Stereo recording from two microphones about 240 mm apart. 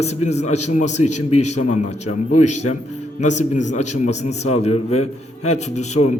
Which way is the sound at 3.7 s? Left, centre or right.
Left.